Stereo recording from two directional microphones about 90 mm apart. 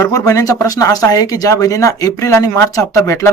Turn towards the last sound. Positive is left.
turn(degrees=35)  # may be behind; listen again after turning